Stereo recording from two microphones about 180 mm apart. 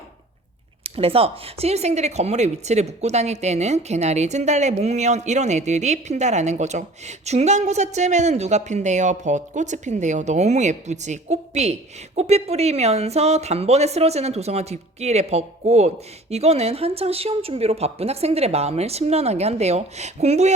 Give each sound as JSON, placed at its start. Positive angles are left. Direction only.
{"t": 0.9, "sound": "speech", "side_deg": -35}